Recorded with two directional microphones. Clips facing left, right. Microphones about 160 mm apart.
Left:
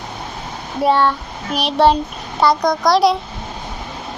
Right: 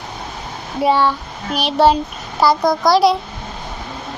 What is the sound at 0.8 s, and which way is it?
A child's voice, centre (ahead or behind).